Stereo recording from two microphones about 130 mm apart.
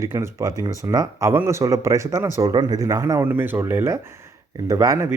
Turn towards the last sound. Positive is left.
turn(degrees=-25)  # may be behind; listen again after turning